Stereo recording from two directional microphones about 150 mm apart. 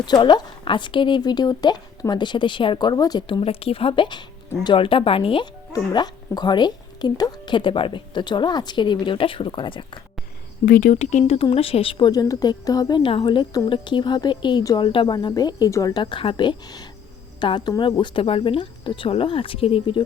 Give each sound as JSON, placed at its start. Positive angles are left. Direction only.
{"t": 0.0, "sound": "speech", "side_deg": 30}
{"t": 10.7, "sound": "speech", "side_deg": 70}
{"t": 10.9, "sound": "speech", "side_deg": 50}